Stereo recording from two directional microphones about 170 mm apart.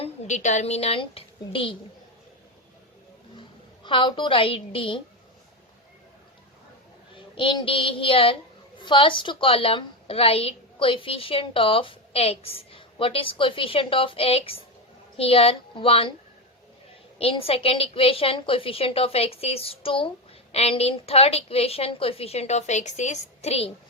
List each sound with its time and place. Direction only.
0.0 s a woman's voice: 40° left (ahead or behind)
3.8 s a woman's voice: 30° left (ahead or behind)
7.3 s a woman's voice: 30° left (ahead or behind)
17.2 s a woman's voice: 35° left (ahead or behind)